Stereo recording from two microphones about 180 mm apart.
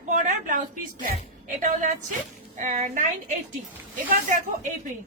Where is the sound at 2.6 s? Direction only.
45° right (ahead or behind).